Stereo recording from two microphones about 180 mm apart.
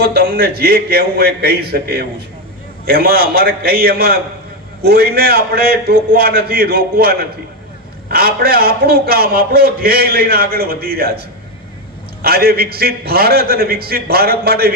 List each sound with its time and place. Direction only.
0.0 s a man's voice: 55° right (ahead or behind)
12.2 s a man's voice: 55° right (ahead or behind)